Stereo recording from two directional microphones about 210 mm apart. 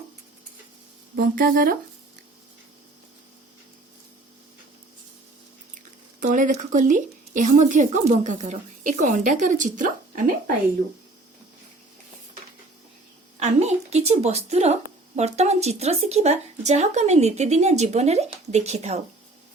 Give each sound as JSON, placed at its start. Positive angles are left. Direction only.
{"t": 1.1, "sound": "speech", "side_deg": -40}
{"t": 6.1, "sound": "a woman's voice", "side_deg": -40}
{"t": 13.4, "sound": "a woman's voice", "side_deg": -30}